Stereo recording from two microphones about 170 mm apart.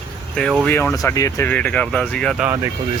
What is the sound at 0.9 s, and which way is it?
Speech, 20° left (ahead or behind).